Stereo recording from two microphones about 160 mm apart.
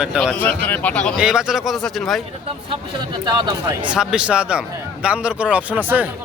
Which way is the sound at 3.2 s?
25° right (ahead or behind).